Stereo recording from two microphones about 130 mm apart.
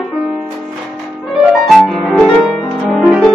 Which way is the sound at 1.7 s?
Centre (ahead or behind).